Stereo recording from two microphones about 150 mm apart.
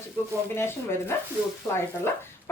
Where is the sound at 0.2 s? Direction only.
15° left (ahead or behind).